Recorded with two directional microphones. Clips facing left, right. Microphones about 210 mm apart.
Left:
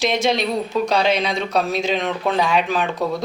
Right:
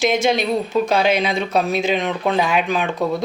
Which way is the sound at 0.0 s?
Centre (ahead or behind).